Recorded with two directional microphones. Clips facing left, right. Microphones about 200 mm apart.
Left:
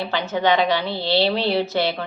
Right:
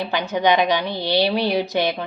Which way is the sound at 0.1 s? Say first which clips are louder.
Right 1 dB; 15° right (ahead or behind).